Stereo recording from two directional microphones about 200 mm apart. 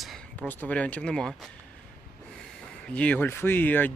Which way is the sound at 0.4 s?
5° left (ahead or behind).